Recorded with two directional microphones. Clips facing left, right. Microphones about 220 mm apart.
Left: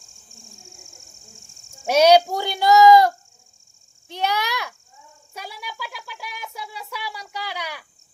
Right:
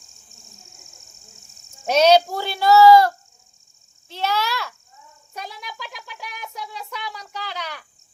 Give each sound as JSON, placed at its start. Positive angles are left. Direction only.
{"t": 1.9, "sound": "speech", "side_deg": 10}
{"t": 4.1, "sound": "speech", "side_deg": 15}